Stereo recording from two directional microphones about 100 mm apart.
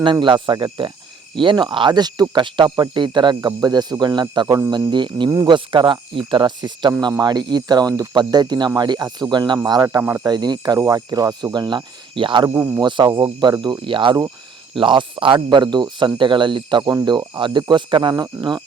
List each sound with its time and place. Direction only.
0.0 s speech: 55° right (ahead or behind)
4.5 s speech: 35° right (ahead or behind)
4.9 s speech: 50° right (ahead or behind)
10.0 s speech: 20° right (ahead or behind)
10.2 s speech: 45° right (ahead or behind)
13.8 s speech: 55° right (ahead or behind)